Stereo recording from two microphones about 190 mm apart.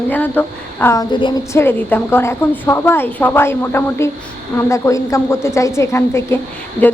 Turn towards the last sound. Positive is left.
turn(degrees=10)  # may be behind; listen again after turning